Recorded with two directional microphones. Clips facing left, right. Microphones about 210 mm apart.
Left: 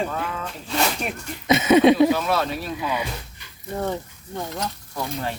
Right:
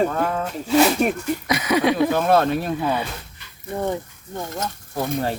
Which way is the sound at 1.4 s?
25° left (ahead or behind).